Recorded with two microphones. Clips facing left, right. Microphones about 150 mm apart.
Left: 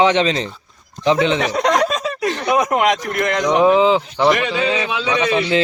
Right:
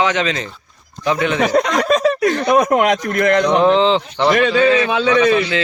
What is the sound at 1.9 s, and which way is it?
Speech, 60° right (ahead or behind).